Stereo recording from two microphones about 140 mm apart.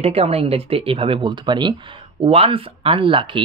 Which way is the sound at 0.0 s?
45° right (ahead or behind).